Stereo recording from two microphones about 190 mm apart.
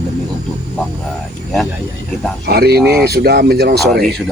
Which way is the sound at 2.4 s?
55° right (ahead or behind).